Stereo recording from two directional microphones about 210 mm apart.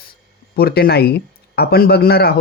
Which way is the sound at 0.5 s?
50° left (ahead or behind).